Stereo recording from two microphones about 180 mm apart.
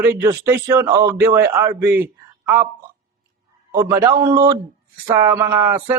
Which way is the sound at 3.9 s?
15° right (ahead or behind).